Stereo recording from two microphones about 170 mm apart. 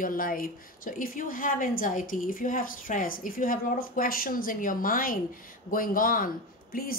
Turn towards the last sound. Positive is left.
turn(degrees=55)  # may be behind; listen again after turning